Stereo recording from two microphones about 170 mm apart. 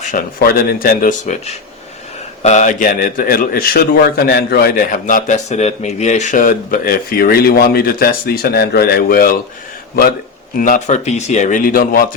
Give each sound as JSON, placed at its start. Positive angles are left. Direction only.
{"t": 0.0, "sound": "a man's voice", "side_deg": 50}
{"t": 10.6, "sound": "speech", "side_deg": 45}